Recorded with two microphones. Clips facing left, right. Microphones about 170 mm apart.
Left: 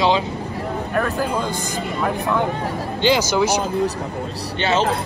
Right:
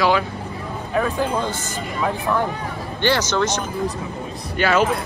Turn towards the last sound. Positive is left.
turn(degrees=25)  # may be behind; listen again after turning